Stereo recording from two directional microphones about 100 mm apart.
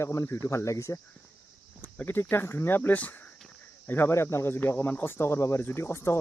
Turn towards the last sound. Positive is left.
turn(degrees=25)  # may be behind; listen again after turning